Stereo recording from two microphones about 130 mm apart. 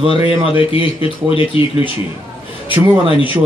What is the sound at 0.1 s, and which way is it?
Speech, 45° left (ahead or behind).